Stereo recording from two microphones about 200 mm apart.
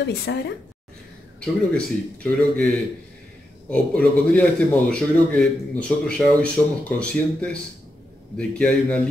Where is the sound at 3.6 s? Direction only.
5° left (ahead or behind).